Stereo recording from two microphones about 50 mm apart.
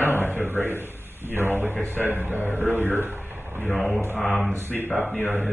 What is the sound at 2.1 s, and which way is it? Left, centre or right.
A man's voice, right.